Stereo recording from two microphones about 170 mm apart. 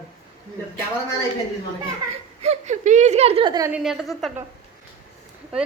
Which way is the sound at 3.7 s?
Centre (ahead or behind).